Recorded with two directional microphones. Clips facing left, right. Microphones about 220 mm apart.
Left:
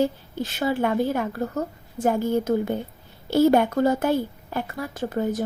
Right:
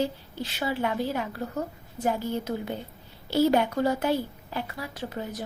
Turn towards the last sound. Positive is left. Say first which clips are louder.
# left 9 dB
turn(degrees=50)  # may be behind; listen again after turning